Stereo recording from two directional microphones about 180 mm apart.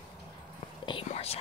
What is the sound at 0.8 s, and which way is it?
Whispering, 30° left (ahead or behind).